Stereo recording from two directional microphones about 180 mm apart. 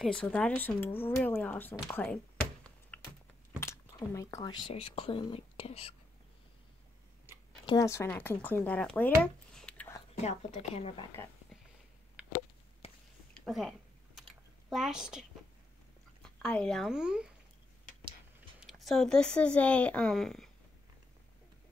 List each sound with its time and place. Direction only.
0.0 s speech: 5° left (ahead or behind)
2.9 s typing: 10° left (ahead or behind)
3.5 s a sound: 15° left (ahead or behind)
4.1 s speech: 15° left (ahead or behind); by 5.9 s 35° left (ahead or behind)
7.6 s speech: 20° left (ahead or behind)
9.2 s a sound: 5° left (ahead or behind)
10.1 s speech: 40° left (ahead or behind)
13.5 s a sound: centre (ahead or behind)
16.2 s speech: 5° left (ahead or behind)
18.6 s speech: centre (ahead or behind)